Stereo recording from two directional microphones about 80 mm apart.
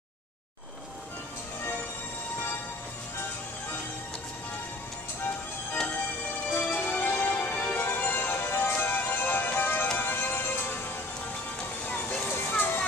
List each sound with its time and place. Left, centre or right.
6.5 s music: left
11.8 s music: centre